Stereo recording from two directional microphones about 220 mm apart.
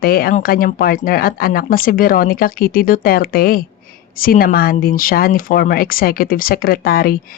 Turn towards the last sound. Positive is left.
turn(degrees=40)  # may be behind; listen again after turning